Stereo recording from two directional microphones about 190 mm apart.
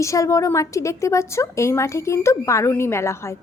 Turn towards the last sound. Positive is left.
turn(degrees=15)  # may be behind; listen again after turning